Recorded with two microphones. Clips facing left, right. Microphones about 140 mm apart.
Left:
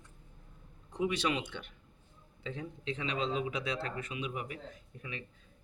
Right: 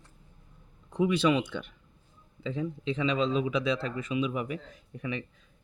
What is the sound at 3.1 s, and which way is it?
A man's voice, 90° right.